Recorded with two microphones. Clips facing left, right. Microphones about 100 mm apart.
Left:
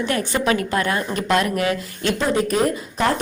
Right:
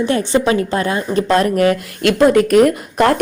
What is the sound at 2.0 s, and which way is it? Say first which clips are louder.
A woman's voice: right 10 dB; 70° right (ahead or behind).